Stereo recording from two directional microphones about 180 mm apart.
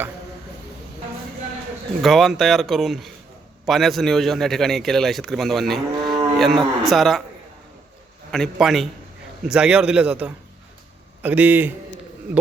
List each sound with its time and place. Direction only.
2.0 s speech: centre (ahead or behind)
6.0 s cattle: 25° right (ahead or behind)
6.4 s speech: centre (ahead or behind)
8.3 s a man's voice: centre (ahead or behind)